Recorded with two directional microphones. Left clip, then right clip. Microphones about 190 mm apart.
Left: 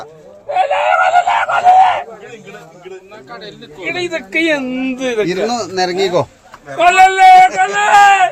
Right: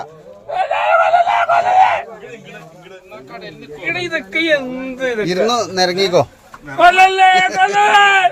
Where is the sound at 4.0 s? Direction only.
45° left (ahead or behind).